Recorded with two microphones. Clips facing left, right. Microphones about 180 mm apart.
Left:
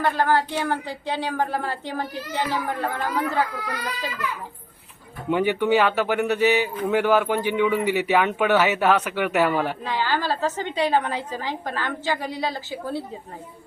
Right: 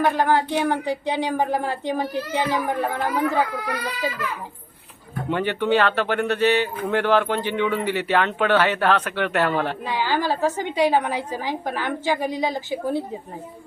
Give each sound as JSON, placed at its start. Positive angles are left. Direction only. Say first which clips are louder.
{"t": 0.0, "sound": "a woman's voice", "louder": "right 2 dB", "side_deg": -15}
{"t": 5.3, "sound": "speech", "louder": "left 1 dB", "side_deg": 10}
{"t": 9.8, "sound": "a woman's voice", "louder": "right 2 dB", "side_deg": -15}